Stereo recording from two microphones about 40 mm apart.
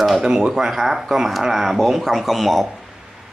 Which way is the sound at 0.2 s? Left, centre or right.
Centre.